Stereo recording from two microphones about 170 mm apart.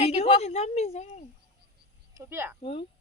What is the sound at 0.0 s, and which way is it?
A woman's voice, 40° left (ahead or behind).